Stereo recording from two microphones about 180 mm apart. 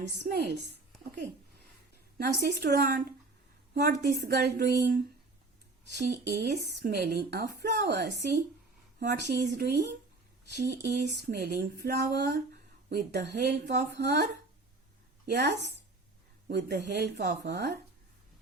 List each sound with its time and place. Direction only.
0.2 s speech: 65° right (ahead or behind)
2.1 s speech: 65° right (ahead or behind)
6.3 s speech: 65° right (ahead or behind)
10.8 s speech: 60° right (ahead or behind)
15.3 s speech: 70° right (ahead or behind)